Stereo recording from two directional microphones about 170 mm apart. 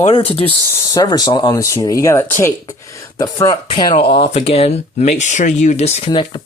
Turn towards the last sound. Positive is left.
turn(degrees=30)  # may be behind; listen again after turning